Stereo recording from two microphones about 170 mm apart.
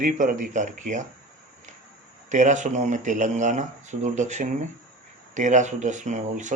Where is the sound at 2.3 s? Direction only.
45° right (ahead or behind).